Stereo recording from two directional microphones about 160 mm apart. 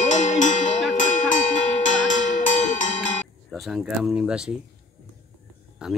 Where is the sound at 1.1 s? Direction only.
55° left (ahead or behind).